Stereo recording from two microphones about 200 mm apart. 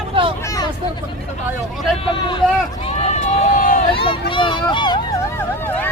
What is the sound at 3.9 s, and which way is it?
Run, 25° left (ahead or behind).